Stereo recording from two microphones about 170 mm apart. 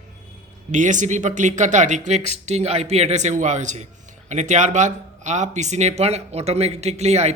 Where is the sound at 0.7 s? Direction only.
45° right (ahead or behind).